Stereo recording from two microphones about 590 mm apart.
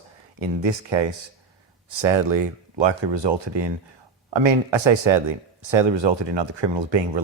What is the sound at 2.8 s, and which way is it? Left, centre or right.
Speech, right.